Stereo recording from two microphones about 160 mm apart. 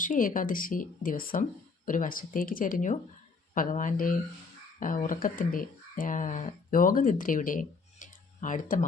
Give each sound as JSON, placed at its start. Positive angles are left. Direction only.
{"t": 0.0, "sound": "speech", "side_deg": 55}